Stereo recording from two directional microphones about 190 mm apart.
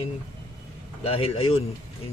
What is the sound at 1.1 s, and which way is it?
Speech, 30° left (ahead or behind).